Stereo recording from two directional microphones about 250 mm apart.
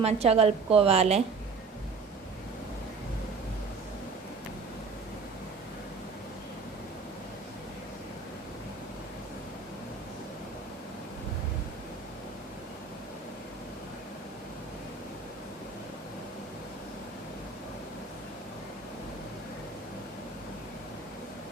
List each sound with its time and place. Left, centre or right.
0.0 s a woman's voice: right